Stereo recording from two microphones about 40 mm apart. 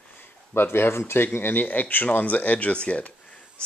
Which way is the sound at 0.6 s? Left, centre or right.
Left.